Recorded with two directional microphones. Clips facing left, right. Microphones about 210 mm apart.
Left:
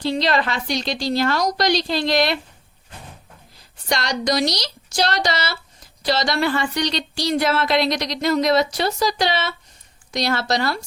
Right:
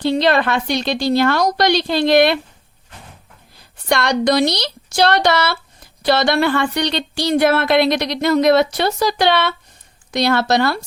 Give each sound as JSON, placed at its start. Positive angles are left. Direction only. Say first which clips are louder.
{"t": 0.0, "sound": "speech", "louder": "right 5 dB", "side_deg": -60}
{"t": 3.8, "sound": "speech", "louder": "right 6 dB", "side_deg": -60}